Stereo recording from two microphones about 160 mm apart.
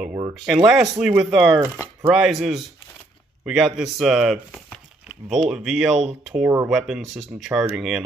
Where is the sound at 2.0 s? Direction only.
Centre (ahead or behind).